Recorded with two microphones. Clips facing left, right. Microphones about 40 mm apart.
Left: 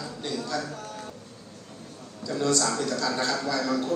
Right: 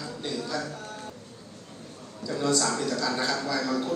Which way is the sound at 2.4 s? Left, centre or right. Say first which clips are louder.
Left 1 dB; centre.